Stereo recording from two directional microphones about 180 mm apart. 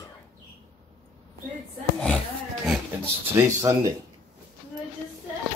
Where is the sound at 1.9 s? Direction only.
Centre (ahead or behind).